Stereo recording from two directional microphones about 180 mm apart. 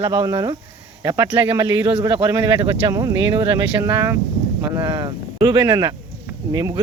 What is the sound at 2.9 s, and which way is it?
Speech, 20° right (ahead or behind).